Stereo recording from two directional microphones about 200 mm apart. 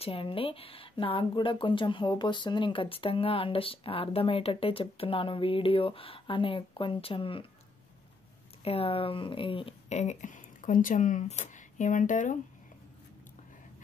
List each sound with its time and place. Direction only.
0.0 s speech: 25° left (ahead or behind)
8.6 s speech: 30° left (ahead or behind)